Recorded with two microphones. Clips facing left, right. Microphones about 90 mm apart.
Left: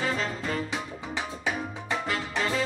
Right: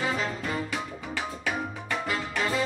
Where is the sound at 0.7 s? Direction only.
20° left (ahead or behind).